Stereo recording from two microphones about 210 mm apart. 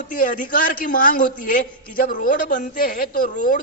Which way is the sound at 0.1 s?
40° left (ahead or behind).